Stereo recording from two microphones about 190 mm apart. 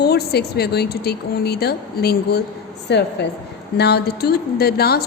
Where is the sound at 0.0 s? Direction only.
60° left (ahead or behind).